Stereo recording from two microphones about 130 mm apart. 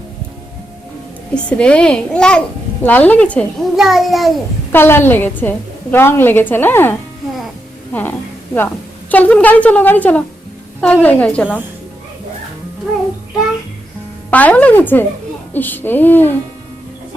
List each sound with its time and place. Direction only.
1.3 s a woman's voice: 10° left (ahead or behind)
3.8 s a child's voice: centre (ahead or behind)
4.7 s a woman's voice: 15° left (ahead or behind)
7.9 s a woman's voice: 15° left (ahead or behind)
14.3 s a woman's voice: 10° left (ahead or behind)